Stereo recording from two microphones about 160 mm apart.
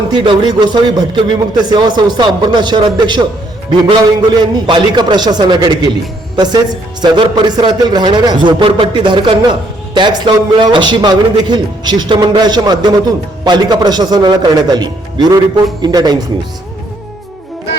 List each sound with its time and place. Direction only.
0.1 s a man's voice: 30° right (ahead or behind)